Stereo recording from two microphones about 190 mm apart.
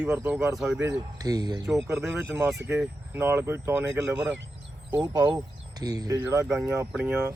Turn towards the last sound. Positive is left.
turn(degrees=-10)  # may be behind; listen again after turning